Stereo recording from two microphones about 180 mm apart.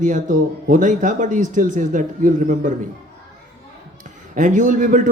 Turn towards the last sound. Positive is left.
turn(degrees=-45)  # may be behind; listen again after turning